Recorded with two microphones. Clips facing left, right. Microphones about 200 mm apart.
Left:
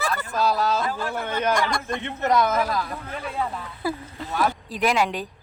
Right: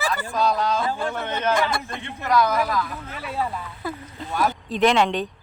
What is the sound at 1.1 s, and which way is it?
Speech, 10° left (ahead or behind).